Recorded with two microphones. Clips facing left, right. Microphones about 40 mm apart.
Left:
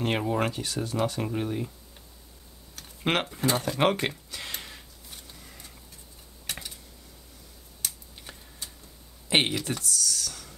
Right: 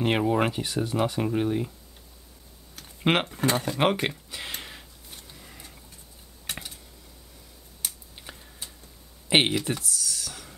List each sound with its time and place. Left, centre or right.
0.2 s speech: centre
2.7 s computer keyboard: centre
3.3 s speech: right
3.6 s speech: centre
5.3 s a sound: centre
7.8 s a sound: centre
9.3 s speech: centre